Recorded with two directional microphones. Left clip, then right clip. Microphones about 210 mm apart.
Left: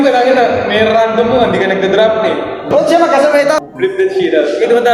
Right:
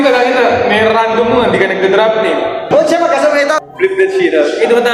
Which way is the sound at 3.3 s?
25° left (ahead or behind).